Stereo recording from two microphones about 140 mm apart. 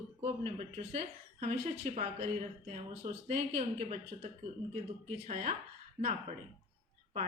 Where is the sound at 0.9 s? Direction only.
55° right (ahead or behind).